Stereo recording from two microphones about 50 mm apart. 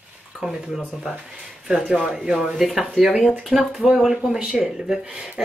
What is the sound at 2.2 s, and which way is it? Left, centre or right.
Speech, right.